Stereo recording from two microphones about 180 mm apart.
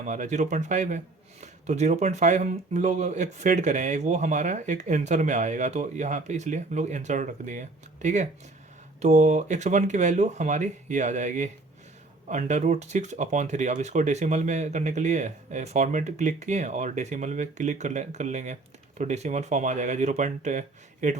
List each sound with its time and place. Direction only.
0.0 s speech: 40° right (ahead or behind)